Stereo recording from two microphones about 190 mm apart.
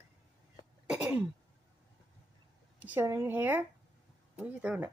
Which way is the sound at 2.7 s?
10° right (ahead or behind).